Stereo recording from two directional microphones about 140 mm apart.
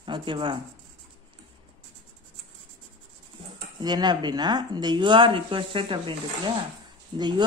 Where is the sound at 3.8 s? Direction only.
30° right (ahead or behind).